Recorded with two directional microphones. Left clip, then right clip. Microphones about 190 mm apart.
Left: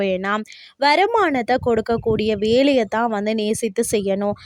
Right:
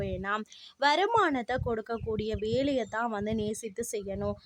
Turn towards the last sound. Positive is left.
turn(degrees=45)  # may be behind; listen again after turning